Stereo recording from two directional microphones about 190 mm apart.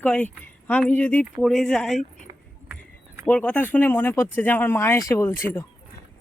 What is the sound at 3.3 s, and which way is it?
Speech, 10° left (ahead or behind).